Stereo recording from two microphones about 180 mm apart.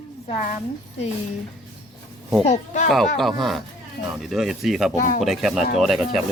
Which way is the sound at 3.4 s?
Centre (ahead or behind).